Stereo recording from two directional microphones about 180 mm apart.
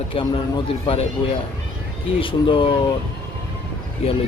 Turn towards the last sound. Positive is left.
turn(degrees=35)  # may be behind; listen again after turning